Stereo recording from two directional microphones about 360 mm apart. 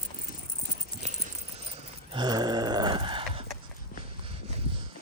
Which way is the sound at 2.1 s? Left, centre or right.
Centre.